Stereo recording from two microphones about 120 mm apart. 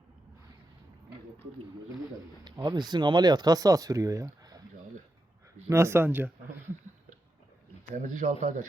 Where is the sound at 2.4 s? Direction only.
35° right (ahead or behind).